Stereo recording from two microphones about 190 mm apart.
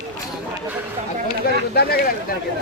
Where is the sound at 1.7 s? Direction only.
55° left (ahead or behind).